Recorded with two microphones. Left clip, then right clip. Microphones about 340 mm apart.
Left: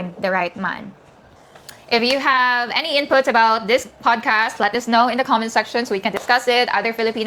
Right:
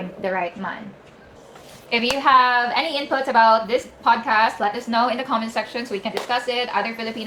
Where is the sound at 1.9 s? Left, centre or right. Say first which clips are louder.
Left 1 dB; left.